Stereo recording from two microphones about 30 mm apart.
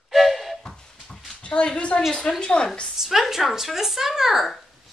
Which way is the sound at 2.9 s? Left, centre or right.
Centre.